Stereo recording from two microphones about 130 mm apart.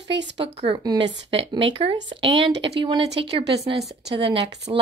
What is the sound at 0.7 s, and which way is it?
A woman's voice, 35° right (ahead or behind).